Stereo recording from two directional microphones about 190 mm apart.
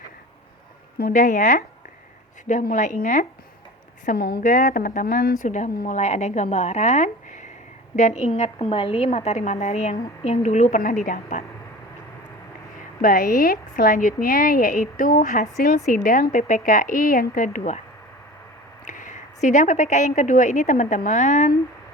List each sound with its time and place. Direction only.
0.9 s a woman's voice: 45° left (ahead or behind)
13.0 s a woman's voice: 50° left (ahead or behind)
18.9 s a woman's voice: 40° left (ahead or behind)